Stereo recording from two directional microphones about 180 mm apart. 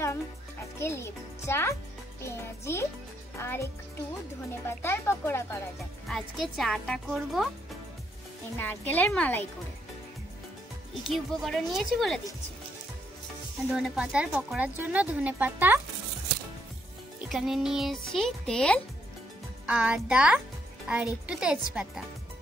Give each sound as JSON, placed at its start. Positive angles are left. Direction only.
{"t": 0.7, "sound": "speech", "side_deg": 15}
{"t": 6.0, "sound": "speech", "side_deg": 0}
{"t": 8.5, "sound": "speech", "side_deg": 10}
{"t": 11.4, "sound": "speech", "side_deg": 0}
{"t": 13.7, "sound": "speech", "side_deg": -5}
{"t": 17.3, "sound": "speech", "side_deg": -5}
{"t": 19.6, "sound": "speech", "side_deg": -5}